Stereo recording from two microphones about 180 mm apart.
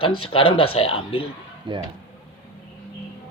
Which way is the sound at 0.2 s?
30° left (ahead or behind).